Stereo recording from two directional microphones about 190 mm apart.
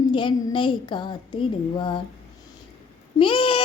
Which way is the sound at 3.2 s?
25° left (ahead or behind).